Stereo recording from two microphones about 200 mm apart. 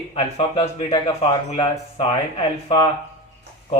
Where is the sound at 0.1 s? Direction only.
30° left (ahead or behind).